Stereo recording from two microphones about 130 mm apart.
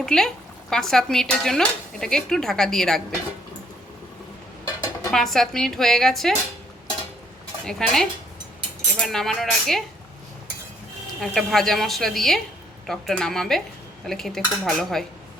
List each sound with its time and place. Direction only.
0.0 s speech: 5° left (ahead or behind)
4.6 s dishes: 30° left (ahead or behind)
5.1 s speech: 5° left (ahead or behind)
7.6 s speech: 5° left (ahead or behind)
11.2 s speech: centre (ahead or behind)